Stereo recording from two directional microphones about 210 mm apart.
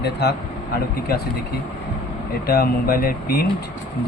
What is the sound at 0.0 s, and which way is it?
Speech, 50° left (ahead or behind).